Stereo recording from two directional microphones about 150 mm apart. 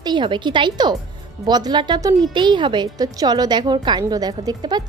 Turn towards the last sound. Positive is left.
turn(degrees=-25)  # may be behind; listen again after turning